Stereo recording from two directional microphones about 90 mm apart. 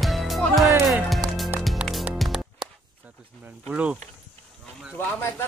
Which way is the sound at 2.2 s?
5° right (ahead or behind).